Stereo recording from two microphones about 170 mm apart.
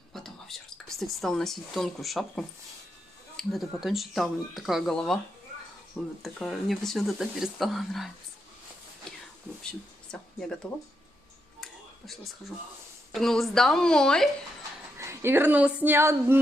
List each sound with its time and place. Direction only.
0.1 s speech: centre (ahead or behind)
9.6 s speech: 5° left (ahead or behind)
11.6 s a sound: centre (ahead or behind)
13.1 s speech: centre (ahead or behind)
15.0 s speech: 15° right (ahead or behind)